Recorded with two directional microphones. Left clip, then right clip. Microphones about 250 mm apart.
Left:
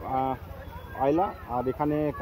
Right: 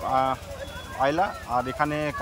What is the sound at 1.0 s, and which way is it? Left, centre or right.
Speech, centre.